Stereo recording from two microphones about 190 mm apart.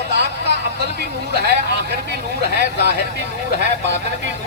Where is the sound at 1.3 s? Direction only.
60° right (ahead or behind).